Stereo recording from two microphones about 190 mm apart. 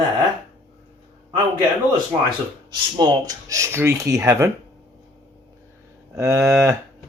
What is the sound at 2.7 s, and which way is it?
Speech, 20° right (ahead or behind).